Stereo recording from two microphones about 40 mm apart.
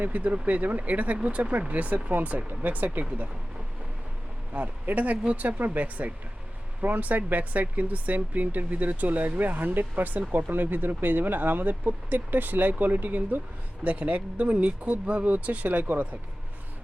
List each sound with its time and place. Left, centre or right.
0.0 s speech: right
4.5 s speech: right
5.5 s speech: right
13.8 s speech: right